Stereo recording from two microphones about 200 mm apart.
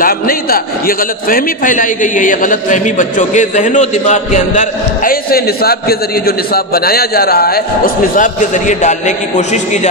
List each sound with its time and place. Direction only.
0.0 s a man's voice: 45° left (ahead or behind)